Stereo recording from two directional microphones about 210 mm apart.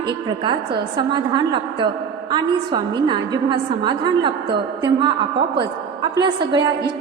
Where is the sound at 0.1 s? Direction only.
20° right (ahead or behind).